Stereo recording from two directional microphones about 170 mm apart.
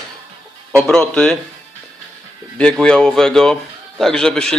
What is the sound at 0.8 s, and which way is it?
Speech, 5° left (ahead or behind).